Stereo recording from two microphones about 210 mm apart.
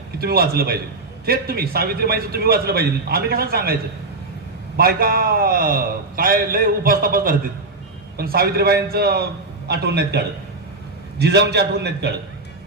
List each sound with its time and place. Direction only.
0.2 s a man's voice: 45° right (ahead or behind)
4.8 s a man's voice: 45° right (ahead or behind)